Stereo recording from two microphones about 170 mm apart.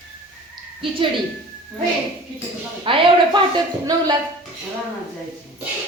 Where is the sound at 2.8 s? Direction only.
30° right (ahead or behind).